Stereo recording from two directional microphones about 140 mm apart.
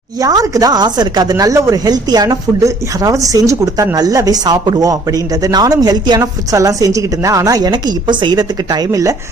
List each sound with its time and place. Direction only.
0.2 s speech: 25° right (ahead or behind)